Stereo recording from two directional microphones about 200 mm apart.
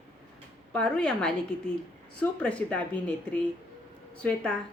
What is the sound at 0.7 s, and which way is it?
A woman's voice, 5° left (ahead or behind).